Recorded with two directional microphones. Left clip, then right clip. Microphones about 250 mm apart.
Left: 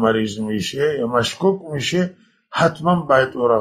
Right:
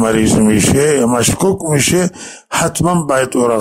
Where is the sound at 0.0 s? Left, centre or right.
Right.